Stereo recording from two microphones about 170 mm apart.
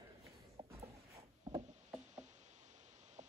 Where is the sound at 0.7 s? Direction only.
35° right (ahead or behind).